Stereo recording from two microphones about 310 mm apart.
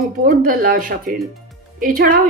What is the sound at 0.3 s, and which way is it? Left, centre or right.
Speech, right.